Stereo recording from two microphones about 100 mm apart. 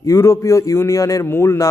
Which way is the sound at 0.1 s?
30° left (ahead or behind).